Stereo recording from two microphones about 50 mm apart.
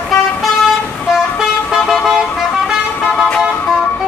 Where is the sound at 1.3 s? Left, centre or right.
Centre.